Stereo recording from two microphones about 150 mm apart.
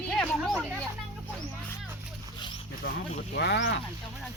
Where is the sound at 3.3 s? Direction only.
90° left.